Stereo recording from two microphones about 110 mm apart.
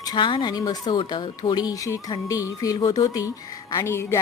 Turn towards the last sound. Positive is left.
turn(degrees=25)  # may be behind; listen again after turning